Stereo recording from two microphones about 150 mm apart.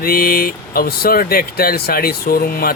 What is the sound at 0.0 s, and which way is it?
Speech, 80° left.